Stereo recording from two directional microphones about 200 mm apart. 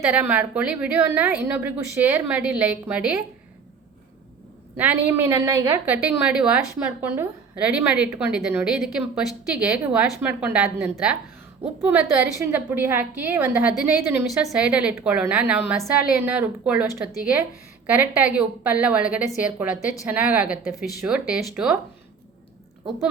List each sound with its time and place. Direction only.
0.0 s a woman's voice: 10° right (ahead or behind)
4.8 s a woman's voice: 10° right (ahead or behind)